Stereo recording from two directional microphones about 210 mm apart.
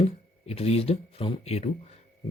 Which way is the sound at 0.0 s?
30° left (ahead or behind).